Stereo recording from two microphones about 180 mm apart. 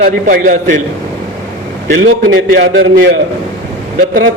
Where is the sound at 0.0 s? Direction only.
50° right (ahead or behind).